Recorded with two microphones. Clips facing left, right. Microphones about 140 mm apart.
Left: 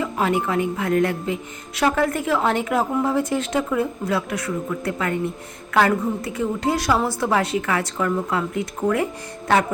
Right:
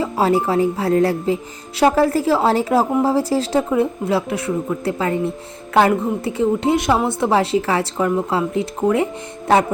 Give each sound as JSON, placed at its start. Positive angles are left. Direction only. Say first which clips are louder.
{"t": 0.0, "sound": "a woman's voice", "louder": "right 4 dB", "side_deg": -35}